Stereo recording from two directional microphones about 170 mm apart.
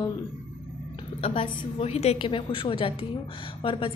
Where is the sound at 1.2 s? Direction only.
35° left (ahead or behind).